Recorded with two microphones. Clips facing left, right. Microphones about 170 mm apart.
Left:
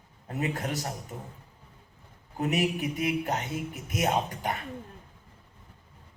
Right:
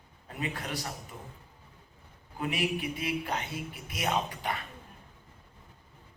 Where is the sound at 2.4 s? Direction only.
45° left (ahead or behind).